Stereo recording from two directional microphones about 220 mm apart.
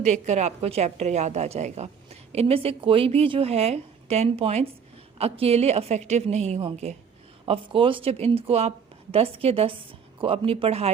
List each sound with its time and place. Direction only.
0.0 s a woman's voice: 30° right (ahead or behind)